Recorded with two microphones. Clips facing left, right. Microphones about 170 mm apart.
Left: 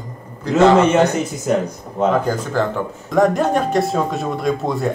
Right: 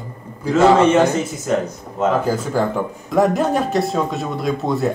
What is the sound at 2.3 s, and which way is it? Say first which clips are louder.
Speech: right 1 dB; 5° right (ahead or behind).